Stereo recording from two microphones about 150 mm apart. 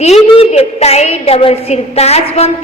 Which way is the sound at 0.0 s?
45° left (ahead or behind).